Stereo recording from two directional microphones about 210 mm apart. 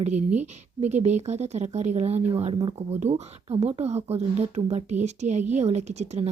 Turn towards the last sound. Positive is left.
turn(degrees=-30)  # may be behind; listen again after turning